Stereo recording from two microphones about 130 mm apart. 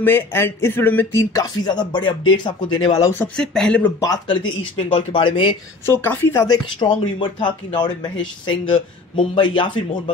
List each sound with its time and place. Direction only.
0.0 s speech: 20° left (ahead or behind)
1.3 s speech: 30° left (ahead or behind)
3.3 s speech: 5° left (ahead or behind)
4.0 s speech: 30° left (ahead or behind)
5.9 s speech: 15° left (ahead or behind); by 10.1 s 40° left (ahead or behind)